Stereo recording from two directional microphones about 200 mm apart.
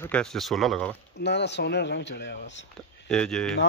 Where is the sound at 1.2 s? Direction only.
60° left (ahead or behind).